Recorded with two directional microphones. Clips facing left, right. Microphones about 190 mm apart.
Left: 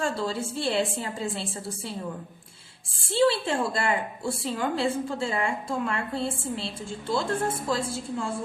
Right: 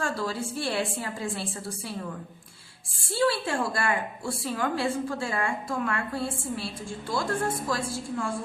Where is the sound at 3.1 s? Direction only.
25° left (ahead or behind).